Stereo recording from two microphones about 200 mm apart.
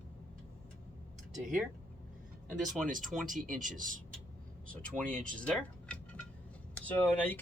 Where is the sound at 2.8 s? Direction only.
40° right (ahead or behind).